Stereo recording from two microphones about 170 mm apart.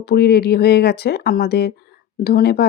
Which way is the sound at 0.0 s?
70° left (ahead or behind).